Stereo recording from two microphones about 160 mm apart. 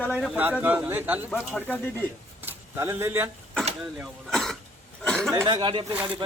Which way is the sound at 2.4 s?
15° right (ahead or behind).